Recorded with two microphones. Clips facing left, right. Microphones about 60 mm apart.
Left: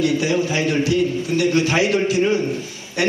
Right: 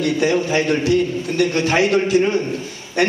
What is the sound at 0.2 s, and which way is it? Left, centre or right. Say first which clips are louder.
A man's voice: right 2 dB; right.